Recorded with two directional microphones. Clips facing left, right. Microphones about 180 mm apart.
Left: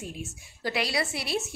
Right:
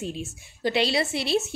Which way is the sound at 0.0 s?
25° right (ahead or behind).